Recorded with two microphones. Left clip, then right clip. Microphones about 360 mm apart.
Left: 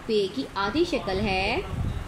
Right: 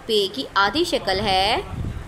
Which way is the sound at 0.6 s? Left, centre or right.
Centre.